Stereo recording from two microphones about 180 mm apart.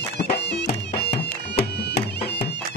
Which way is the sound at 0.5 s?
70° left (ahead or behind).